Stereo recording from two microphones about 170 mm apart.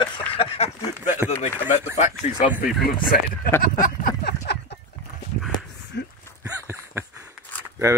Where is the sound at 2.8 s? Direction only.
55° left (ahead or behind).